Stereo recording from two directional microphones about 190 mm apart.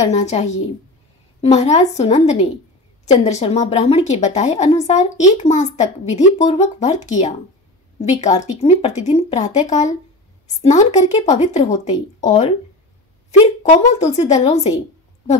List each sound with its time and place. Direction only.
0.1 s a woman's voice: 35° left (ahead or behind)
13.6 s a woman's voice: 35° left (ahead or behind)